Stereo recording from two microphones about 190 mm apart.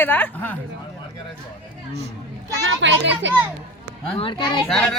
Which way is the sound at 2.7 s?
70° right (ahead or behind).